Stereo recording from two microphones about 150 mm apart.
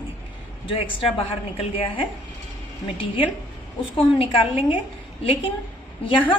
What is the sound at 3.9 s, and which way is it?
Speech, 35° left (ahead or behind).